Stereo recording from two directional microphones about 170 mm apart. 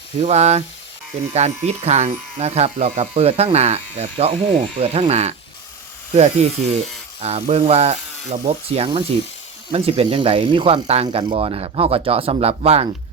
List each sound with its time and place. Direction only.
0.2 s speech: 40° right (ahead or behind)